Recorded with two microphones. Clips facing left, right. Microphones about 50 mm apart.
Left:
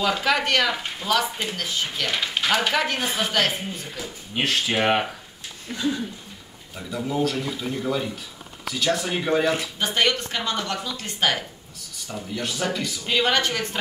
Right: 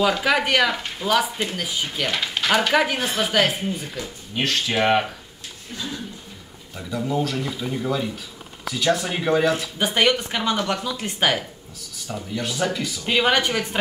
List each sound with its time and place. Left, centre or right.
0.0 s speech: centre
2.1 s a sound: centre
2.7 s speech: centre
4.4 s speech: centre
6.8 s speech: centre
9.8 s speech: centre
13.0 s speech: centre